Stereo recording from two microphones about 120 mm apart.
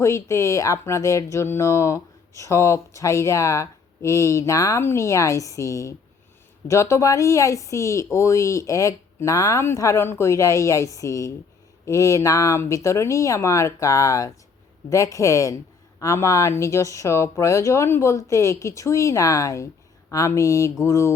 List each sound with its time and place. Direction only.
0.0 s speech: 25° left (ahead or behind)